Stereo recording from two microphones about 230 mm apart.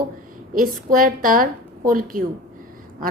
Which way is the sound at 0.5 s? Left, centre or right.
Right.